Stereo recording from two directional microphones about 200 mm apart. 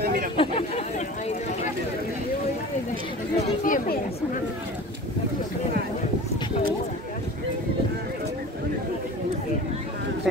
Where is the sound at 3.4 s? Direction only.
40° left (ahead or behind).